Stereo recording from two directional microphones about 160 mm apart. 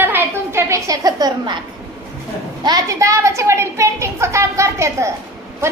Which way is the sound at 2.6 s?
25° right (ahead or behind).